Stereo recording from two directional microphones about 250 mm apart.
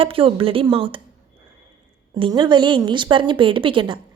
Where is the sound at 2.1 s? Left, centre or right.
Centre.